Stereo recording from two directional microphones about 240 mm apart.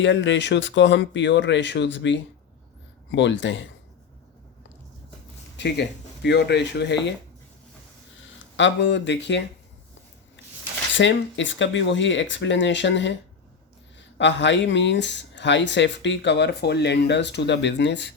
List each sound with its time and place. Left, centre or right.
0.0 s speech: left
5.5 s speech: left
8.5 s speech: left
10.9 s speech: left
14.2 s speech: left